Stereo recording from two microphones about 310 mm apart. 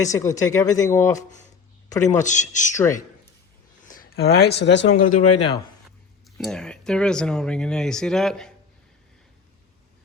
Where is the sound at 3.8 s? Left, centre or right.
Left.